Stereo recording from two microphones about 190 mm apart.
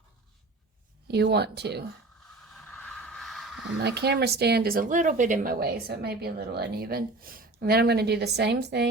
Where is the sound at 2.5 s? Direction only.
Centre (ahead or behind).